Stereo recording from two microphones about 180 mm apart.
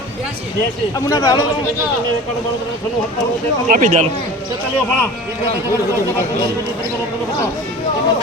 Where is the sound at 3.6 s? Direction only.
50° right (ahead or behind).